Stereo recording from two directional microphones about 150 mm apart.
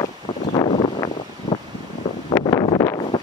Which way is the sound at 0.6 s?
45° left (ahead or behind).